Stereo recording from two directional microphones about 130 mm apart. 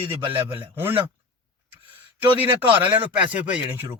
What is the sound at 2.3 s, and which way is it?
Speech, 15° right (ahead or behind).